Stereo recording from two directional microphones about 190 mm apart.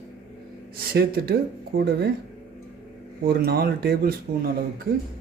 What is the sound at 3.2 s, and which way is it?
Speech, 55° right (ahead or behind).